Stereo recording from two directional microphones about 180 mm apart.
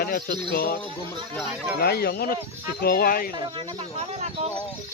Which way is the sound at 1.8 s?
60° left (ahead or behind).